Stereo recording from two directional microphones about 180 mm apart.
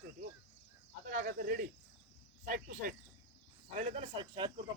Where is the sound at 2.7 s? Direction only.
50° right (ahead or behind).